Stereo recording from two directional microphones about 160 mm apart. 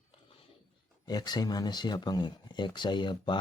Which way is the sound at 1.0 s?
25° left (ahead or behind).